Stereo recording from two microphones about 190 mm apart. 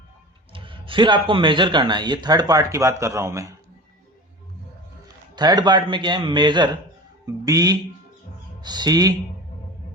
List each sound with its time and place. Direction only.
0.5 s speech: 25° right (ahead or behind)
5.3 s speech: 20° right (ahead or behind)